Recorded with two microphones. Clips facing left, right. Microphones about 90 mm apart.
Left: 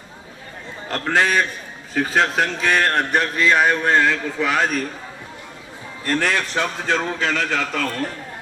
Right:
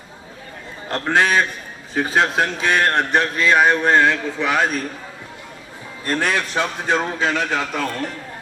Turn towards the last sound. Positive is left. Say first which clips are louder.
# right 1 dB
turn(degrees=-20)  # may be behind; listen again after turning